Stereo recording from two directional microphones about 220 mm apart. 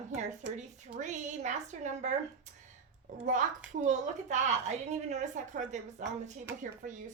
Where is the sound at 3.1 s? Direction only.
35° right (ahead or behind).